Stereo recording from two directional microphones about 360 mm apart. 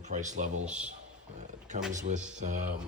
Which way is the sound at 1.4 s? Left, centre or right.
Centre.